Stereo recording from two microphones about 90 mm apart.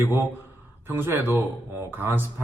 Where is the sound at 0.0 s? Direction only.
20° right (ahead or behind).